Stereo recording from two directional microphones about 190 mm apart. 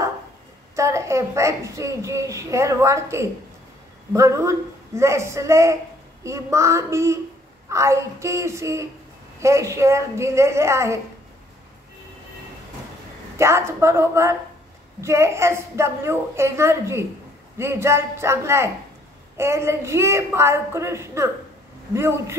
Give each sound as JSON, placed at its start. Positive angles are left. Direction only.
{"t": 0.7, "sound": "a woman's voice", "side_deg": -15}
{"t": 13.4, "sound": "a woman's voice", "side_deg": -15}